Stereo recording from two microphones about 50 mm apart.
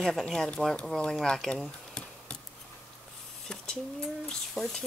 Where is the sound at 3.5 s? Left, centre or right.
Centre.